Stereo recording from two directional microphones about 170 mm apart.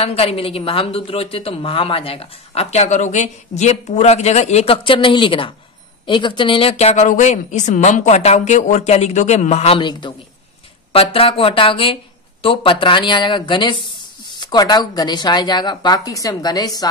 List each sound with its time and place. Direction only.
0.0 s a woman's voice: 35° left (ahead or behind)
9.8 s speech: 25° left (ahead or behind)